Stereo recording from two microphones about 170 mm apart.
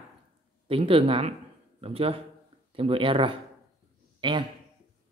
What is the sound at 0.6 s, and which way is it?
Speech, 35° right (ahead or behind).